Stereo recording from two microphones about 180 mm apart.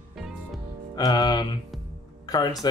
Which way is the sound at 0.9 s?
20° left (ahead or behind).